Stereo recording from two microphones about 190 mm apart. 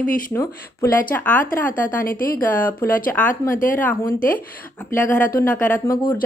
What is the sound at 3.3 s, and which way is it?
Speech, 45° left (ahead or behind).